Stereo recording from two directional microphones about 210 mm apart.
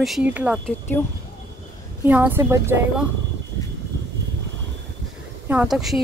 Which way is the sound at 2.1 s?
10° right (ahead or behind).